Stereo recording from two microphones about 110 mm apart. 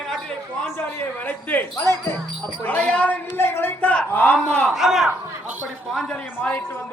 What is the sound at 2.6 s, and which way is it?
Speech, 10° left (ahead or behind).